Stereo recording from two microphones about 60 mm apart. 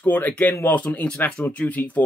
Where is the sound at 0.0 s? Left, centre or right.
Left.